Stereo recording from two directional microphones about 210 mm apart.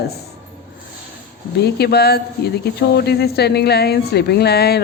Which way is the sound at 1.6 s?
50° left (ahead or behind).